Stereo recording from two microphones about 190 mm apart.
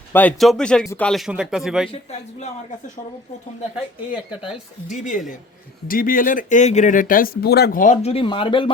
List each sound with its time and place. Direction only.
0.1 s speech: 10° left (ahead or behind)
4.9 s a woman's voice: 40° left (ahead or behind); by 8.7 s 25° left (ahead or behind)